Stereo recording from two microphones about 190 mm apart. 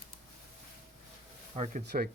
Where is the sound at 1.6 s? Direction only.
45° right (ahead or behind).